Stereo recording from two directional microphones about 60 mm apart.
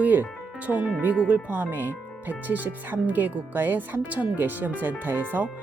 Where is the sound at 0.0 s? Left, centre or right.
Right.